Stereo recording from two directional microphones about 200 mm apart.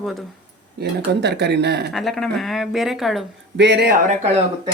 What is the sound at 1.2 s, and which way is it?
Speech, 55° right (ahead or behind).